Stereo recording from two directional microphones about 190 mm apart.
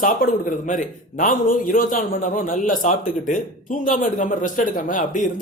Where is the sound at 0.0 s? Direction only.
45° left (ahead or behind).